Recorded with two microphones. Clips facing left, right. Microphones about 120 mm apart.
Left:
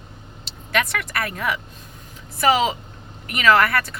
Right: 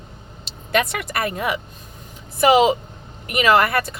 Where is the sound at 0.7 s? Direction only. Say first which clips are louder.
Right 3 dB; 20° right (ahead or behind).